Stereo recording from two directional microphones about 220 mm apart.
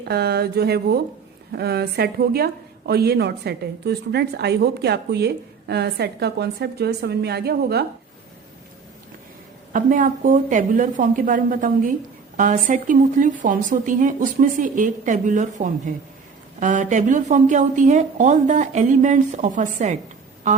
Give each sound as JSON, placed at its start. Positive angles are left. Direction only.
{"t": 0.0, "sound": "a woman's voice", "side_deg": -45}
{"t": 9.7, "sound": "a woman's voice", "side_deg": -35}